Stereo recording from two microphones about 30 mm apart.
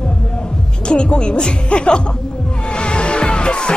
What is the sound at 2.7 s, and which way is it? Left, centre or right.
Music, left.